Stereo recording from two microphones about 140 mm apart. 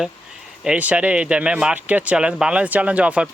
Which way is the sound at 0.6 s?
10° right (ahead or behind).